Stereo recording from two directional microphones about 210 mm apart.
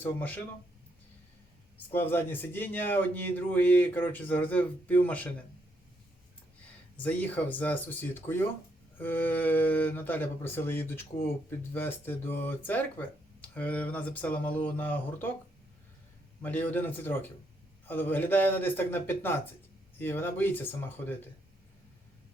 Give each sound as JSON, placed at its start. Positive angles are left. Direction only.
{"t": 0.0, "sound": "speech", "side_deg": 10}
{"t": 1.9, "sound": "speech", "side_deg": 10}
{"t": 6.9, "sound": "speech", "side_deg": 10}
{"t": 16.4, "sound": "speech", "side_deg": 10}